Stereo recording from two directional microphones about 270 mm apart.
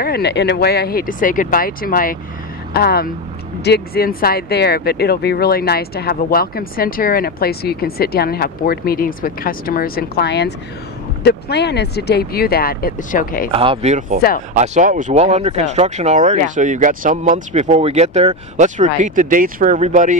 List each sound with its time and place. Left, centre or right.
0.0 s speech: left
13.5 s speech: right